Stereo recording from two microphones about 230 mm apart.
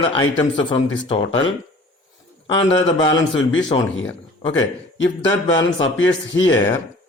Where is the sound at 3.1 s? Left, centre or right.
Left.